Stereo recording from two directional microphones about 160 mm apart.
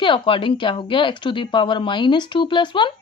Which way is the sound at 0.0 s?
30° left (ahead or behind).